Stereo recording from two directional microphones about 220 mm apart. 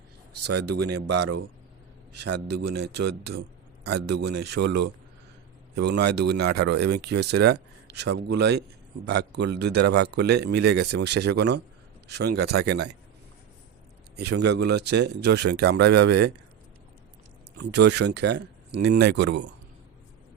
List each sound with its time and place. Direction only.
0.3 s speech: 90° right
0.9 s speech: 50° right (ahead or behind)
2.5 s speech: 50° right (ahead or behind)
14.3 s speech: 50° right (ahead or behind)
17.6 s speech: 50° right (ahead or behind)